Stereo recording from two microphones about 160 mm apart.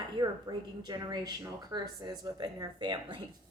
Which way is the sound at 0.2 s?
25° right (ahead or behind).